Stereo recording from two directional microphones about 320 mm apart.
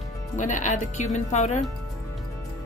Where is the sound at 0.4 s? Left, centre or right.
Left.